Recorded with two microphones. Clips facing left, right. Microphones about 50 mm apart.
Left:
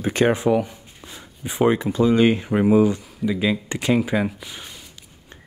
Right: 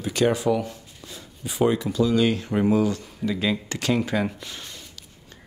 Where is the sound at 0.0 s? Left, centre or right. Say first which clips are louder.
Left 3 dB; left; by 4.8 s centre.